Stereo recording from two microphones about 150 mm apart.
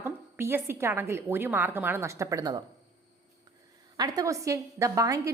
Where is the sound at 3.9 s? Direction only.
25° right (ahead or behind).